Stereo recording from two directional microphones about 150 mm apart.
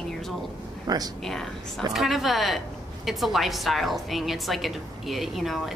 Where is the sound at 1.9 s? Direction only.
Centre (ahead or behind).